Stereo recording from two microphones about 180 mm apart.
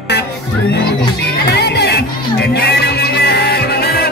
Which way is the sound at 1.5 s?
65° left (ahead or behind).